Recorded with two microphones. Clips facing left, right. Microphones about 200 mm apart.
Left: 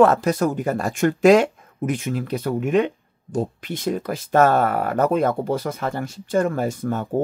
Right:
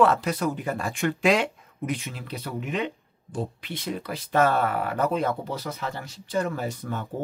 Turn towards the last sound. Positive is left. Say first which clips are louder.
# left 7 dB
turn(degrees=45)  # may be behind; listen again after turning